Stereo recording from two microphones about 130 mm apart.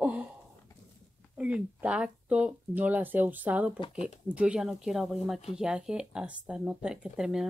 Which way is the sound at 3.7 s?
40° left (ahead or behind).